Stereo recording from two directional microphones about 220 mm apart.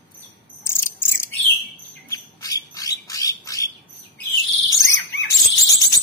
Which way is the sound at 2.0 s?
15° left (ahead or behind).